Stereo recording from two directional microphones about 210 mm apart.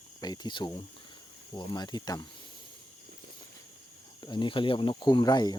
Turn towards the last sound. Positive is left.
turn(degrees=20)  # may be behind; listen again after turning